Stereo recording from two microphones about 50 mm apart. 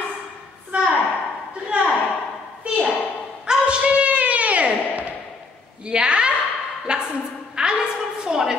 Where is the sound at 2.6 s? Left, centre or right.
Right.